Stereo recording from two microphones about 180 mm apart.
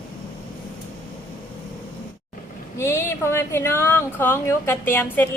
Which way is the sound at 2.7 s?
15° left (ahead or behind).